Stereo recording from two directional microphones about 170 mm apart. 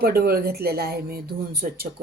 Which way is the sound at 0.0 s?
60° right (ahead or behind).